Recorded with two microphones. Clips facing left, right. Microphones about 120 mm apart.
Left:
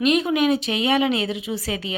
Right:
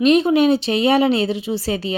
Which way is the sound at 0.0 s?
30° right (ahead or behind).